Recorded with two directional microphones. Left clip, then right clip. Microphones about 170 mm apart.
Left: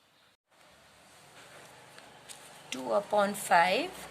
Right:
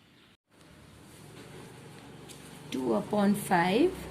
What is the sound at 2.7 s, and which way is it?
Speech, 35° left (ahead or behind).